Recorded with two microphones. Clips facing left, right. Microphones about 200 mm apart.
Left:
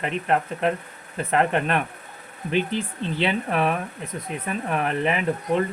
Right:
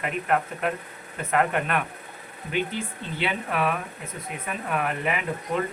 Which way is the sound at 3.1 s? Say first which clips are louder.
Left 3 dB; 30° left (ahead or behind).